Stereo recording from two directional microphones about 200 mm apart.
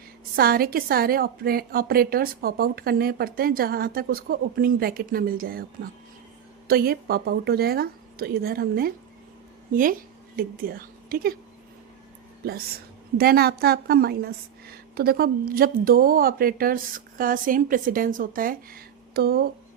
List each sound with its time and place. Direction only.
0.3 s a woman's voice: 50° right (ahead or behind)
10.3 s a woman's voice: 45° right (ahead or behind)
13.1 s a woman's voice: 50° right (ahead or behind)